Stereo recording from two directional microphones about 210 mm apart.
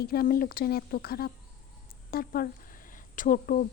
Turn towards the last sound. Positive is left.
turn(degrees=40)  # may be behind; listen again after turning